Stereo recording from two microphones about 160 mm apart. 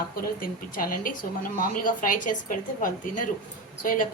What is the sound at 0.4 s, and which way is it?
A woman's voice, 60° left (ahead or behind).